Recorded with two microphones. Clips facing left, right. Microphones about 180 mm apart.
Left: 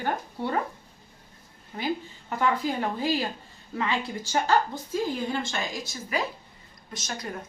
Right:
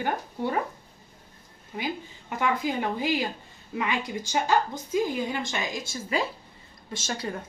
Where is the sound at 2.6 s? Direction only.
15° right (ahead or behind).